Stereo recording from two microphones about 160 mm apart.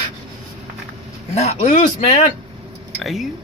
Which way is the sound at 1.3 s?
40° left (ahead or behind).